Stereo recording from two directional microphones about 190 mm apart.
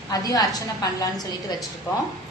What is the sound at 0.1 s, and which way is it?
Speech, 20° left (ahead or behind).